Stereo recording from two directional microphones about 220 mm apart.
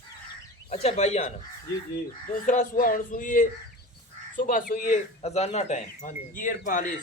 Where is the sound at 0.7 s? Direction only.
30° left (ahead or behind).